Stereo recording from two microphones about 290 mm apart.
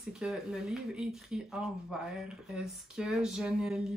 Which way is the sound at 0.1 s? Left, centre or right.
Centre.